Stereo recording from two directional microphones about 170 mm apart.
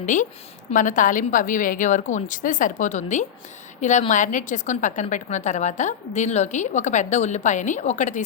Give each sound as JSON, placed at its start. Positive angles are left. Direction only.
{"t": 0.0, "sound": "a woman's voice", "side_deg": 50}